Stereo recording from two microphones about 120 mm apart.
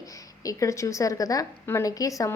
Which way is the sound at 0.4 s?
25° left (ahead or behind).